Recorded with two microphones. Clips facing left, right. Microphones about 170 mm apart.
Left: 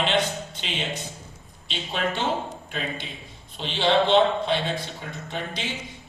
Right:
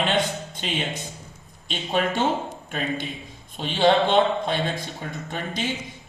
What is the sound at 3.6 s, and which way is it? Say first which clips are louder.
Speech: right 3 dB; 45° right (ahead or behind).